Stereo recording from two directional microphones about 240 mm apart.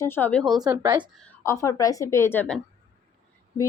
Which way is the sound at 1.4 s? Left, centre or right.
Centre.